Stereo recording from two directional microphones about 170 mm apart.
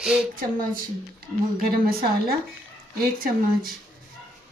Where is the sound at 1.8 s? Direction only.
60° right (ahead or behind).